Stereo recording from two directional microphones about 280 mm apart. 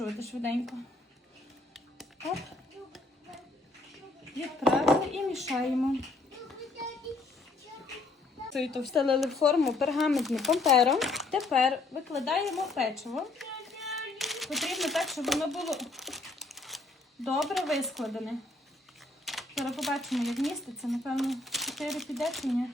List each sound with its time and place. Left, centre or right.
0.3 s speech: centre
1.7 s a sound: centre
4.4 s speech: centre
8.5 s speech: centre